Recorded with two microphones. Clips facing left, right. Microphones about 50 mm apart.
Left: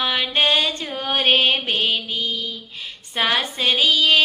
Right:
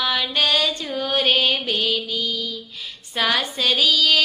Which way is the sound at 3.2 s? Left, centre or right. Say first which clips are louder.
Even; left.